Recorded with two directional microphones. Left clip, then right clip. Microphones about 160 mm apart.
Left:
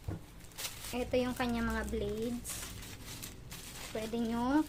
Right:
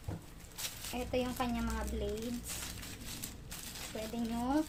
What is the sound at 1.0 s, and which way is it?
Speech, 35° left (ahead or behind).